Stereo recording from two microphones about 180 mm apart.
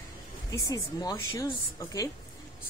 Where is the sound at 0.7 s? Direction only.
20° left (ahead or behind).